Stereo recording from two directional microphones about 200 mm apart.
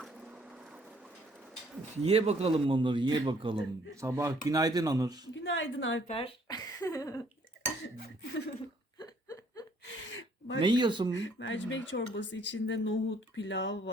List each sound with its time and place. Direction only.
0.0 s vehicle: centre (ahead or behind)
2.0 s a man's voice: 30° right (ahead or behind)
5.3 s speech: 70° left (ahead or behind)
6.1 s speech: 25° left (ahead or behind)
6.7 s a sound: 15° left (ahead or behind)
9.0 s a sound: 20° left (ahead or behind)
9.8 s gasp: 75° left (ahead or behind)
10.6 s a man's voice: 25° right (ahead or behind)
11.1 s speech: 70° left (ahead or behind)